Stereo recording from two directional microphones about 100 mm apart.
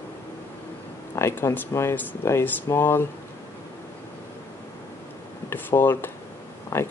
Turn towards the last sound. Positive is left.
turn(degrees=25)  # may be behind; listen again after turning